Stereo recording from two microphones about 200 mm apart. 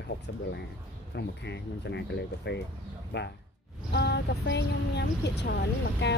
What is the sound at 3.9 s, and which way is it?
Speech, 55° left (ahead or behind).